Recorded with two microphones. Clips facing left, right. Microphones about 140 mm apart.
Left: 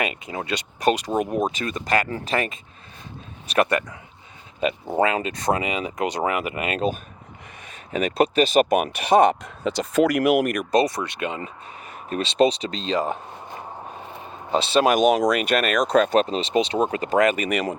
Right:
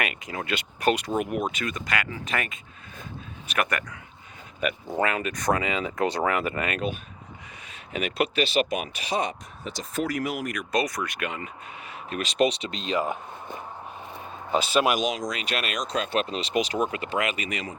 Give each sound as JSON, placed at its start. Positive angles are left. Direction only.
{"t": 0.0, "sound": "speech", "side_deg": 25}
{"t": 1.2, "sound": "speech", "side_deg": 35}
{"t": 7.7, "sound": "speech", "side_deg": 40}
{"t": 9.6, "sound": "speech", "side_deg": 85}
{"t": 10.7, "sound": "speech", "side_deg": 30}
{"t": 14.7, "sound": "speech", "side_deg": 35}
{"t": 14.9, "sound": "speech", "side_deg": 60}
{"t": 16.2, "sound": "speech", "side_deg": 30}